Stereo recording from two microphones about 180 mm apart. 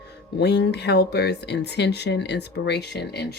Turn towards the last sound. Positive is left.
turn(degrees=65)  # may be behind; listen again after turning